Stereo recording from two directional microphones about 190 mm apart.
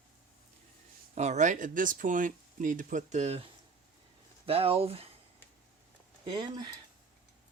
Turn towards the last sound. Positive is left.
turn(degrees=-25)  # may be behind; listen again after turning